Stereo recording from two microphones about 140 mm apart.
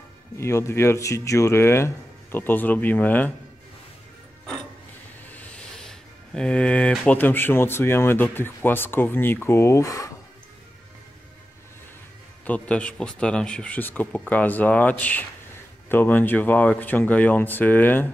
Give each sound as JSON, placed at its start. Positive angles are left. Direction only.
{"t": 0.4, "sound": "speech", "side_deg": 20}
{"t": 5.3, "sound": "speech", "side_deg": 10}
{"t": 12.4, "sound": "speech", "side_deg": 10}